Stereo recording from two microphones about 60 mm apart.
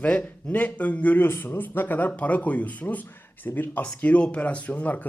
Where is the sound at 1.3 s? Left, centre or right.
Left.